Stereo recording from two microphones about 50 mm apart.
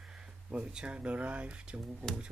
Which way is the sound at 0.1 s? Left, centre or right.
Centre.